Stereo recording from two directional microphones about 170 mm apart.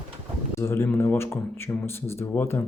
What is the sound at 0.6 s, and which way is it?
Speech, 15° left (ahead or behind).